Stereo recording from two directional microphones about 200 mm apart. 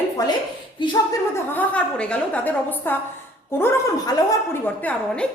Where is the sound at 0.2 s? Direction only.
20° left (ahead or behind).